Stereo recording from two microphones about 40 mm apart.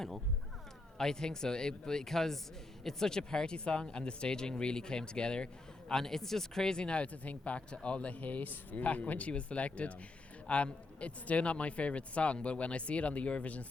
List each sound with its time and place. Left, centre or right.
0.9 s speech: centre
5.9 s a man's voice: centre; by 13.7 s left